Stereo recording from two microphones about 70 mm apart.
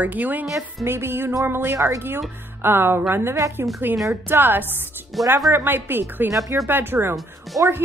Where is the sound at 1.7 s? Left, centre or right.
Right.